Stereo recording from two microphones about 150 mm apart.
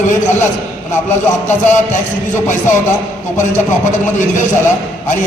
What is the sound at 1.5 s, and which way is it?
Speech, 55° left (ahead or behind).